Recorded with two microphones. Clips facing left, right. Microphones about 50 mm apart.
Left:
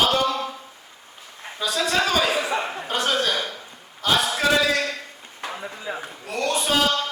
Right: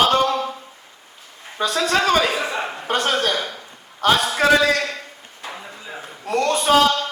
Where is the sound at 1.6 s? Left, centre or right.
Right.